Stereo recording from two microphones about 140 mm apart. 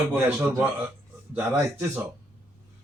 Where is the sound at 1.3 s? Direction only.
15° right (ahead or behind).